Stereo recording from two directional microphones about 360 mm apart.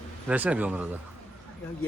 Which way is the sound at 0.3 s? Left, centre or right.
Centre.